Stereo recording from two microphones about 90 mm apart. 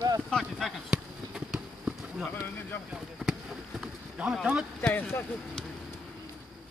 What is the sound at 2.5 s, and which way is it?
Speech, 25° left (ahead or behind).